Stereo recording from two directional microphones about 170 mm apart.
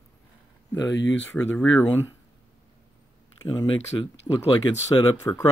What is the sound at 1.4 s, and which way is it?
Speech, 10° left (ahead or behind).